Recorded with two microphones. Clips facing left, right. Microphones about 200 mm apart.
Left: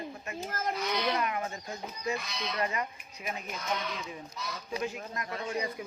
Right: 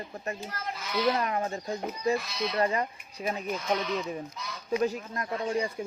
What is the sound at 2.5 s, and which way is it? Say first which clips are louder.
Speech: right 5 dB; 35° right (ahead or behind).